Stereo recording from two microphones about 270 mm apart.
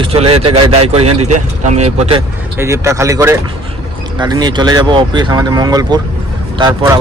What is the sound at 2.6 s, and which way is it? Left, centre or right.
Speech, centre.